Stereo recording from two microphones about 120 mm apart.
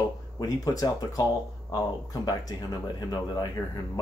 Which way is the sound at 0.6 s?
30° left (ahead or behind).